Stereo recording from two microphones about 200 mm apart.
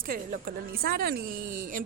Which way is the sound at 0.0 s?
45° right (ahead or behind).